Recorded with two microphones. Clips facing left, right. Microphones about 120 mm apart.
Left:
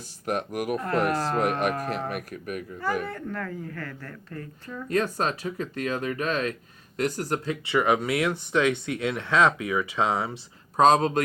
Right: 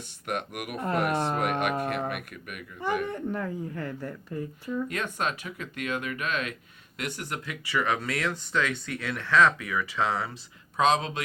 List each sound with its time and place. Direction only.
0.3 s speech: 35° left (ahead or behind)
0.8 s speech: 15° right (ahead or behind)
1.4 s speech: 35° left (ahead or behind)
3.1 s speech: 20° right (ahead or behind)
4.9 s speech: 35° left (ahead or behind)
7.6 s speech: 20° left (ahead or behind)
10.8 s speech: 45° left (ahead or behind)